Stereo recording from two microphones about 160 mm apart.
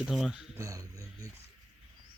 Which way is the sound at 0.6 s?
20° right (ahead or behind).